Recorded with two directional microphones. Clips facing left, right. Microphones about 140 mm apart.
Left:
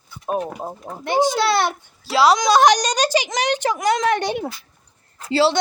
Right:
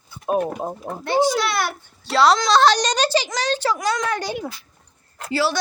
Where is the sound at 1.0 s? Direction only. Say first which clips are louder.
Even; 15° left (ahead or behind).